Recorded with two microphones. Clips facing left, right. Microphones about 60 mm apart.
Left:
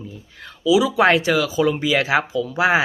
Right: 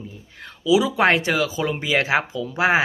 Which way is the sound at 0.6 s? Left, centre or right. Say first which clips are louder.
Left 2 dB; right.